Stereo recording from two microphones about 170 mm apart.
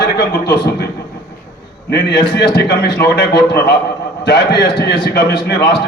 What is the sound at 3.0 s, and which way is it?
A man's voice, 70° left (ahead or behind).